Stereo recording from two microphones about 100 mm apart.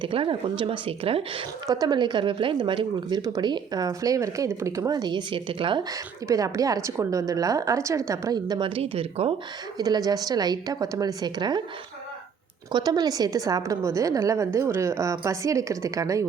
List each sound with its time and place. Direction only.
0.0 s speech: 65° right (ahead or behind)
1.6 s a woman's voice: 40° right (ahead or behind)
4.9 s speech: 50° right (ahead or behind)
5.9 s a woman's voice: 35° right (ahead or behind)
8.7 s speech: 70° right (ahead or behind)
9.7 s a woman's voice: 40° right (ahead or behind)
12.7 s a woman's voice: 45° right (ahead or behind)